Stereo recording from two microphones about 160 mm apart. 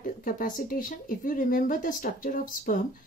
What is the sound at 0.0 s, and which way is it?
Speech, 60° left (ahead or behind).